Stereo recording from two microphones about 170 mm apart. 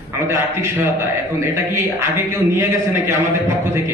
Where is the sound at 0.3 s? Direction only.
15° right (ahead or behind).